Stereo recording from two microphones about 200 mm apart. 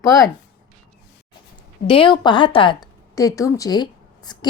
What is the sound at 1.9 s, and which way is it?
A woman's voice, 25° left (ahead or behind).